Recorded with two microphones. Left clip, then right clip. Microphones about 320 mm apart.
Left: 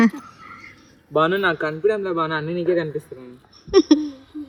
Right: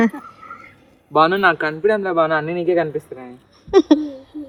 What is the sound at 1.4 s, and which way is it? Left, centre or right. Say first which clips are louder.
A woman's voice: right 4 dB; centre.